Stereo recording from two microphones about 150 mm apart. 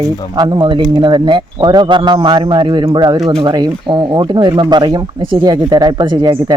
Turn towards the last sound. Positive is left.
turn(degrees=-30)  # may be behind; listen again after turning